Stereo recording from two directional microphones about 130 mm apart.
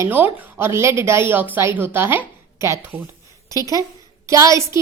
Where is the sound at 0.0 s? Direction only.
15° right (ahead or behind).